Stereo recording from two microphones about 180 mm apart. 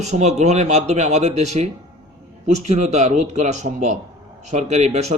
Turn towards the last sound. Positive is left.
turn(degrees=-40)  # may be behind; listen again after turning